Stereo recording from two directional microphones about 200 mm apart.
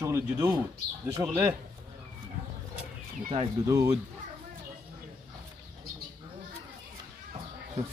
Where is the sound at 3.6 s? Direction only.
15° right (ahead or behind).